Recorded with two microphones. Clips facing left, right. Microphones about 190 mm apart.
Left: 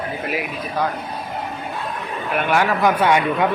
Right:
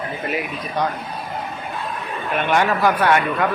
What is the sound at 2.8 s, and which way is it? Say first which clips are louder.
Speech: left 1 dB; 15° left (ahead or behind).